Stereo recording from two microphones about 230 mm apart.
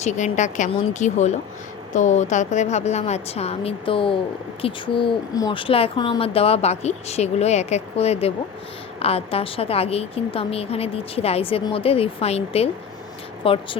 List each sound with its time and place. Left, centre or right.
0.0 s a woman's voice: left